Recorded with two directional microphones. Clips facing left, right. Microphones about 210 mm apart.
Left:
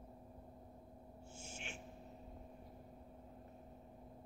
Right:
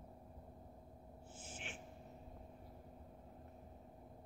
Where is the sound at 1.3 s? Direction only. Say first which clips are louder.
Left 1 dB; 25° left (ahead or behind).